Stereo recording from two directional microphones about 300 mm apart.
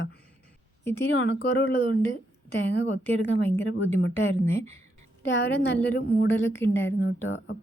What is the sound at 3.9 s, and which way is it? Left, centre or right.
A woman's voice, left.